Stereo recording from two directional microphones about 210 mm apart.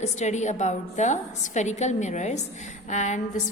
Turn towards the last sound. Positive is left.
turn(degrees=35)  # may be behind; listen again after turning